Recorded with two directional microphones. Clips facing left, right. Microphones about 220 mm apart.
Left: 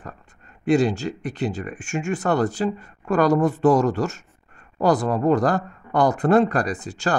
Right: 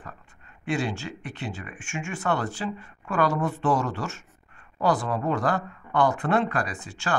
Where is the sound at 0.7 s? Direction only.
40° left (ahead or behind).